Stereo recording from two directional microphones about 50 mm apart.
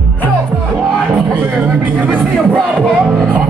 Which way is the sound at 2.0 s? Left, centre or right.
Right.